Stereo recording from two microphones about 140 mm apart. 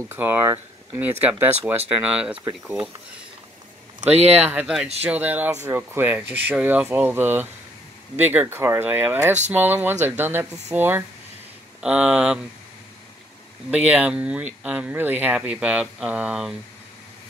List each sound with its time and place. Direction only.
0.1 s speech: 15° right (ahead or behind)
4.0 s speech: 50° right (ahead or behind)
4.4 s speech: 10° right (ahead or behind)
13.7 s speech: 10° right (ahead or behind)